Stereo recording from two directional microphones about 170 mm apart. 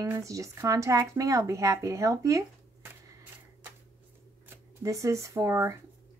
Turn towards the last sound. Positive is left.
turn(degrees=-15)  # may be behind; listen again after turning